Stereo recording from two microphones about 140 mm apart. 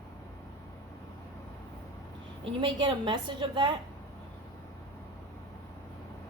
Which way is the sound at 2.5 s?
35° right (ahead or behind).